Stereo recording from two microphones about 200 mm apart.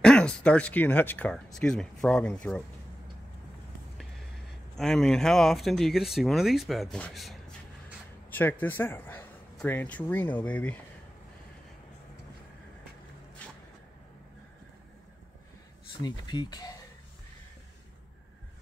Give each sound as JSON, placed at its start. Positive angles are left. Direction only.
{"t": 0.0, "sound": "speech", "side_deg": 5}
{"t": 4.7, "sound": "speech", "side_deg": 0}
{"t": 16.0, "sound": "speech", "side_deg": 20}